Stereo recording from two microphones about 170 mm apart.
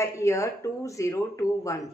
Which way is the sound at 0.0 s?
15° left (ahead or behind).